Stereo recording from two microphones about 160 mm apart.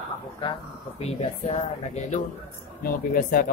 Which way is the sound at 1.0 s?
40° left (ahead or behind).